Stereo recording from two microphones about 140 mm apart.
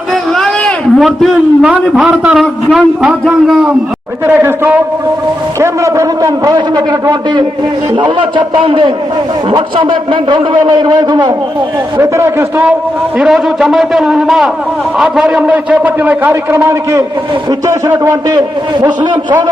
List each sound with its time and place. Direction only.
0.1 s a man's voice: 5° left (ahead or behind); by 7.4 s 30° right (ahead or behind)
8.5 s a man's voice: 35° right (ahead or behind)
11.9 s a man's voice: 20° right (ahead or behind)
13.1 s a man's voice: 5° right (ahead or behind); by 18.9 s 30° right (ahead or behind)